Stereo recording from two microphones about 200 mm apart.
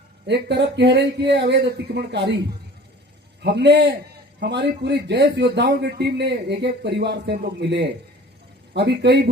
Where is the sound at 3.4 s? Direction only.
55° right (ahead or behind).